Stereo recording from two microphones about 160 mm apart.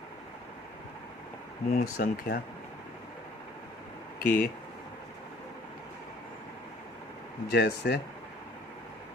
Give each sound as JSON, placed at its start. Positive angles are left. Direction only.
{"t": 1.7, "sound": "speech", "side_deg": 75}
{"t": 4.2, "sound": "speech", "side_deg": 70}
{"t": 7.5, "sound": "speech", "side_deg": 90}